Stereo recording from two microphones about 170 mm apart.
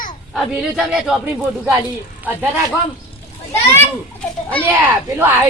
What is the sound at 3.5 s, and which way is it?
A child's voice, 10° left (ahead or behind).